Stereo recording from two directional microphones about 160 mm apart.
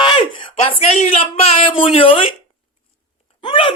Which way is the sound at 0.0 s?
30° left (ahead or behind).